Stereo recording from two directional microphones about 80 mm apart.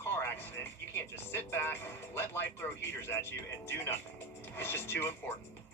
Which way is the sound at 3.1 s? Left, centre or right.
Left.